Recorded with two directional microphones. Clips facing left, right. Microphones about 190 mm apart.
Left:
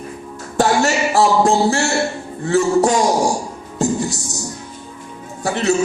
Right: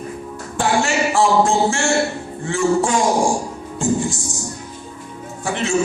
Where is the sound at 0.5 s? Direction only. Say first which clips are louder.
Left 3 dB; 40° left (ahead or behind).